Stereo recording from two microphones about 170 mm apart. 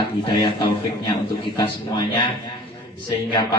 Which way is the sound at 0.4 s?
25° left (ahead or behind).